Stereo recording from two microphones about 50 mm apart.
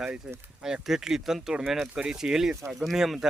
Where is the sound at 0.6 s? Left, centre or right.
Centre.